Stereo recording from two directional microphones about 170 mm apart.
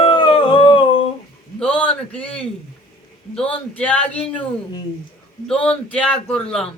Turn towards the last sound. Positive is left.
turn(degrees=5)  # may be behind; listen again after turning